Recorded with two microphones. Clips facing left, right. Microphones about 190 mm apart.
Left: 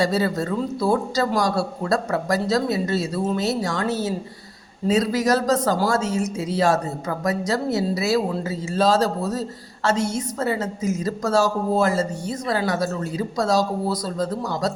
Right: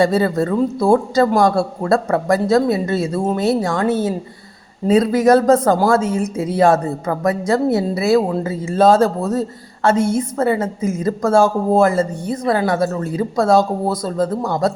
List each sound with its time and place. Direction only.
0.0 s speech: 55° right (ahead or behind)